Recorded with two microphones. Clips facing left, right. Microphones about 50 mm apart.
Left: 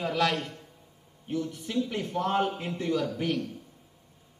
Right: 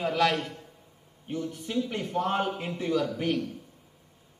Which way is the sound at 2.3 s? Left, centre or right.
Centre.